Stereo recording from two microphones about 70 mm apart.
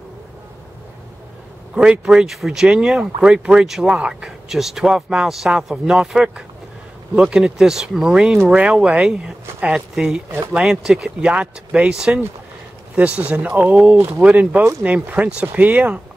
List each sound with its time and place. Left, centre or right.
1.8 s a man's voice: centre